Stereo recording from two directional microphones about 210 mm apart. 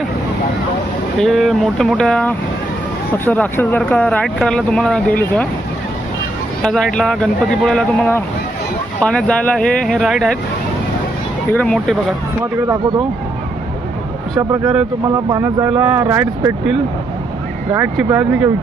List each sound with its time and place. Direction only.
1.2 s speech: centre (ahead or behind)
6.6 s speech: centre (ahead or behind)
11.5 s speech: 5° left (ahead or behind)
14.3 s speech: 15° right (ahead or behind)
17.9 s speech: 5° right (ahead or behind)